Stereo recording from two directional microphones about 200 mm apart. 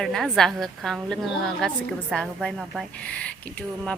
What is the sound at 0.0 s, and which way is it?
A woman's voice, centre (ahead or behind).